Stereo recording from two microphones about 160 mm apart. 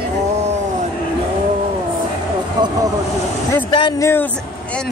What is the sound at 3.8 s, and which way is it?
Speech, 30° left (ahead or behind).